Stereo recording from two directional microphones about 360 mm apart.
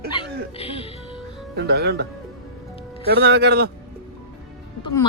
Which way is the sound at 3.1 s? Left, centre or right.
Right.